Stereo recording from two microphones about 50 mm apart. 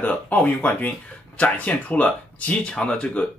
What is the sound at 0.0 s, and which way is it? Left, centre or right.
Speech, left.